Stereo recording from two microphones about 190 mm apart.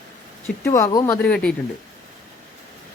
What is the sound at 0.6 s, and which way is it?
Speech, 15° left (ahead or behind).